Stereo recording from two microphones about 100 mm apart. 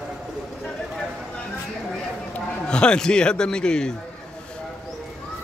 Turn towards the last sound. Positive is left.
turn(degrees=10)  # may be behind; listen again after turning